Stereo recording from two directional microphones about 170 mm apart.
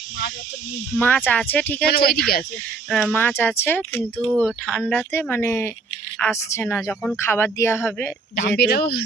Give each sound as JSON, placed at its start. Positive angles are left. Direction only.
{"t": 0.9, "sound": "speech", "side_deg": 10}
{"t": 1.9, "sound": "speech", "side_deg": 70}
{"t": 2.9, "sound": "speech", "side_deg": 5}
{"t": 8.4, "sound": "speech", "side_deg": 80}